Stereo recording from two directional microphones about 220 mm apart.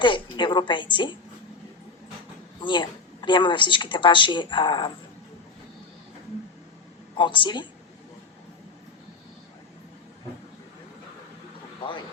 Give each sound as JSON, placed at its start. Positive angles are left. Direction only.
{"t": 0.0, "sound": "speech", "side_deg": 20}
{"t": 2.6, "sound": "speech", "side_deg": 20}
{"t": 7.2, "sound": "speech", "side_deg": 20}